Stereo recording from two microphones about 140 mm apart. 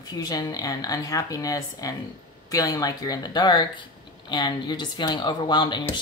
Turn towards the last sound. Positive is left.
turn(degrees=30)  # may be behind; listen again after turning